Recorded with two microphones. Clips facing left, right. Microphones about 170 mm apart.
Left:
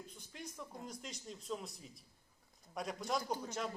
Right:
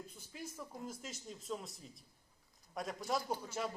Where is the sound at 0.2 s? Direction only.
5° right (ahead or behind).